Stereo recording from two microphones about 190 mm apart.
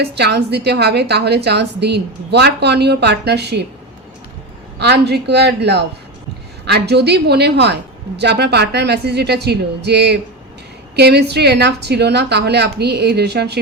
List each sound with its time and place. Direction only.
0.0 s a woman's voice: 60° right (ahead or behind)
4.8 s a woman's voice: 60° right (ahead or behind)